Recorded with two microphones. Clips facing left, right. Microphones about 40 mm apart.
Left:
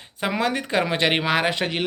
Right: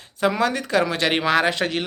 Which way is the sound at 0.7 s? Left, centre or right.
Left.